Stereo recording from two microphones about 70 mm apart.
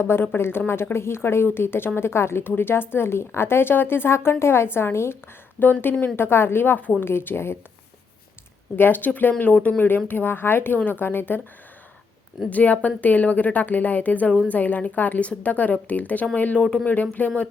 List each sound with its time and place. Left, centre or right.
0.0 s a woman's voice: left
8.7 s a woman's voice: left
12.5 s speech: left